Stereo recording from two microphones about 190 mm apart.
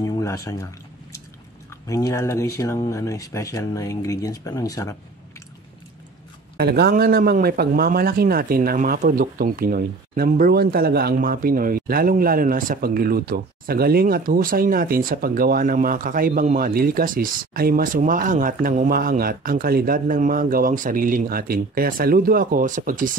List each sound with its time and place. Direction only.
0.0 s speech: 15° left (ahead or behind)
1.9 s speech: 15° left (ahead or behind)
6.5 s speech: 55° right (ahead or behind)